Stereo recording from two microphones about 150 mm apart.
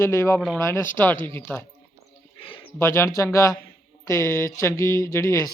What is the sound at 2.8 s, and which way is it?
Speech, 15° left (ahead or behind).